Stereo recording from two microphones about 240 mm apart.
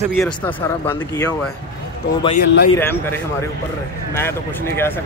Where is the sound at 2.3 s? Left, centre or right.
Left.